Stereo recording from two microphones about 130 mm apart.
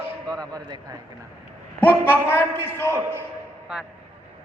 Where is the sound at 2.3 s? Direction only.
20° left (ahead or behind).